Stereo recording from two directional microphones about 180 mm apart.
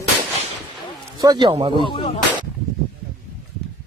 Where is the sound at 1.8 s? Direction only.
25° left (ahead or behind).